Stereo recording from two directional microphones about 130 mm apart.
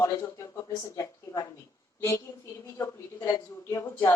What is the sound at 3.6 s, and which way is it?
Speech, 25° left (ahead or behind).